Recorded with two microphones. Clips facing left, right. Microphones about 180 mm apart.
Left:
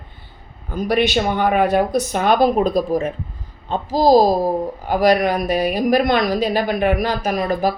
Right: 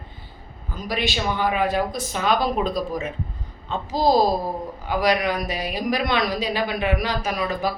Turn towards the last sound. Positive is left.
turn(degrees=45)  # may be behind; listen again after turning